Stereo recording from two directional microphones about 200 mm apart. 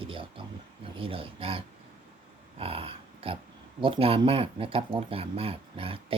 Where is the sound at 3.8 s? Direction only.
25° right (ahead or behind).